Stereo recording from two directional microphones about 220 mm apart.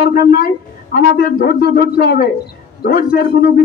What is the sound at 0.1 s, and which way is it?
A man's voice, 45° left (ahead or behind).